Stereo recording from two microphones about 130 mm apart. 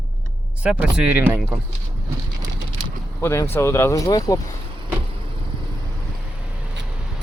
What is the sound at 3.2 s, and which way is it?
Speech, 20° left (ahead or behind).